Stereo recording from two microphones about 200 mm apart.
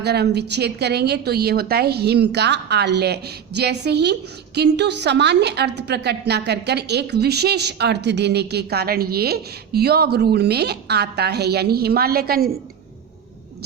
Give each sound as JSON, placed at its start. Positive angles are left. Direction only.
{"t": 0.0, "sound": "a woman's voice", "side_deg": -55}